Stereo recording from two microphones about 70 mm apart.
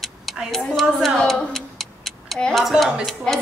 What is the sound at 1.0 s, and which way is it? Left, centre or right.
Tick, centre.